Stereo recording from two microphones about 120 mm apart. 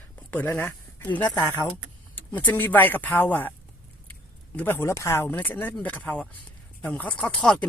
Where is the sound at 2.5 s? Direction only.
15° left (ahead or behind).